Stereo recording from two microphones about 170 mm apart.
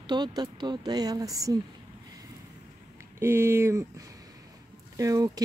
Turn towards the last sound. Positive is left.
turn(degrees=-20)  # may be behind; listen again after turning